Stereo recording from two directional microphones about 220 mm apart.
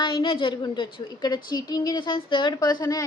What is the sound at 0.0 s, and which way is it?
A woman's voice, 20° left (ahead or behind).